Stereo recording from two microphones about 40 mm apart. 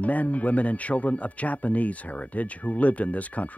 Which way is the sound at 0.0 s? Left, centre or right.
Left.